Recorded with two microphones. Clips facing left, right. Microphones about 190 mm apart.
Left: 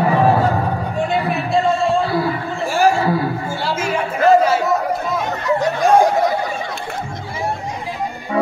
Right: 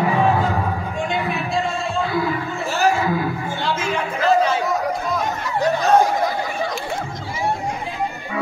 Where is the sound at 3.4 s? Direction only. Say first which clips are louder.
Left 2 dB; 10° left (ahead or behind).